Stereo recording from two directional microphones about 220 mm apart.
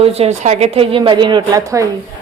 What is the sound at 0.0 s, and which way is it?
A woman's voice, 30° right (ahead or behind).